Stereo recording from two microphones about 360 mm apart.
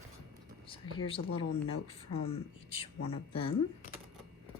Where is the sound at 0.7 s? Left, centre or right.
Centre.